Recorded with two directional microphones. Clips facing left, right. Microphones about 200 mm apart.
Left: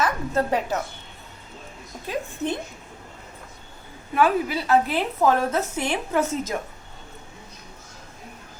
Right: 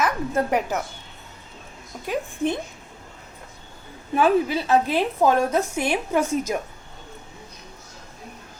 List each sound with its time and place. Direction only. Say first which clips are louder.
0.0 s a woman's voice: right 1 dB; 10° right (ahead or behind)
2.0 s a woman's voice: right 3 dB; 15° right (ahead or behind)
4.1 s a woman's voice: right 2 dB; 25° right (ahead or behind)